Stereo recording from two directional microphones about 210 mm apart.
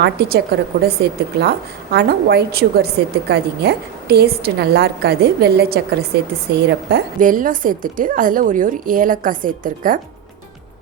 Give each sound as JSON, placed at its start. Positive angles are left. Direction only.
{"t": 0.0, "sound": "a woman's voice", "side_deg": -50}